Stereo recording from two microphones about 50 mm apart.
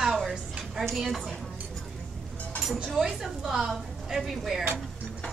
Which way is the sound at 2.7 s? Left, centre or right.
Centre.